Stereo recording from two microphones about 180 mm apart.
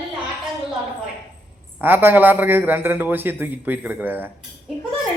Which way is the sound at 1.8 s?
10° right (ahead or behind).